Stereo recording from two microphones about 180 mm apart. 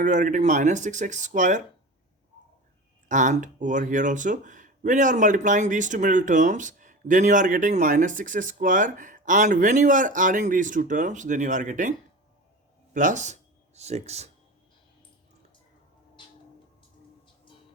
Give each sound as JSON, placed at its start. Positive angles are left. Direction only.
{"t": 0.0, "sound": "speech", "side_deg": -45}
{"t": 3.1, "sound": "speech", "side_deg": -45}
{"t": 16.2, "sound": "a sound", "side_deg": 25}